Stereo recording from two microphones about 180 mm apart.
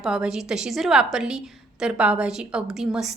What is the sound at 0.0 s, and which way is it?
A woman's voice, 5° right (ahead or behind).